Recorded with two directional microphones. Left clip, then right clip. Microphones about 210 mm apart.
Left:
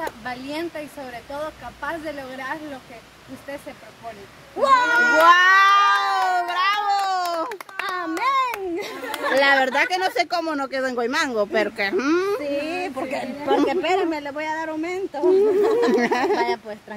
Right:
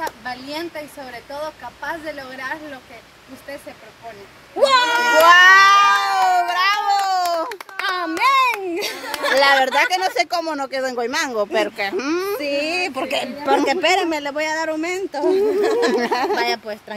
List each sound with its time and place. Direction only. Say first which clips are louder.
0.0 s speech: right 2 dB; 10° right (ahead or behind)
4.6 s speech: right 1 dB; 40° right (ahead or behind)
5.2 s cat: right 5 dB; centre (ahead or behind)
7.8 s a sound: right 5 dB; 45° right (ahead or behind)
9.3 s speech: right 3 dB; centre (ahead or behind)
12.4 s a sound: right 4 dB; 45° right (ahead or behind)
13.7 s speech: right 4 dB; 50° right (ahead or behind)
15.9 s speech: right 1 dB; 5° left (ahead or behind)
16.3 s speech: right 2 dB; 45° right (ahead or behind)